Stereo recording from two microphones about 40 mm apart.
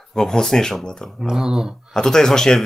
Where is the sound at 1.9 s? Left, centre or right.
Centre.